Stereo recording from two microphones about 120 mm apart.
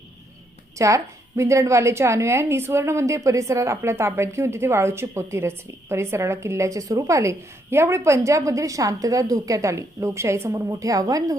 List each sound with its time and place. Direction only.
0.8 s a woman's voice: 25° right (ahead or behind)